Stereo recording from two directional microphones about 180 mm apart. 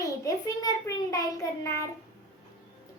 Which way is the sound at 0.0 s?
20° left (ahead or behind).